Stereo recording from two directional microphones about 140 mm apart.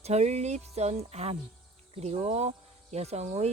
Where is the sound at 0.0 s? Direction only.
50° right (ahead or behind).